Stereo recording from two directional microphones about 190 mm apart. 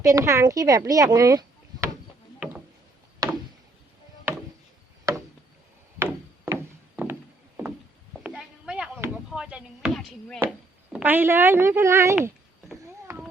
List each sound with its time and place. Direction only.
0.0 s speech: 15° right (ahead or behind)
3.2 s a sound: 15° right (ahead or behind)
6.0 s a sound: 10° right (ahead or behind)
8.2 s chop: 5° right (ahead or behind)
10.9 s speech: 10° right (ahead or behind)
13.1 s cat: 15° right (ahead or behind)